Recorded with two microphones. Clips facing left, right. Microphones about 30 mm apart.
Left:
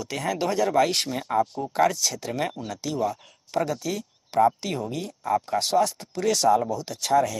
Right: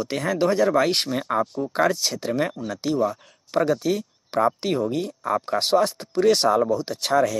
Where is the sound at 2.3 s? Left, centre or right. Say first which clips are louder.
Right 7 dB; centre.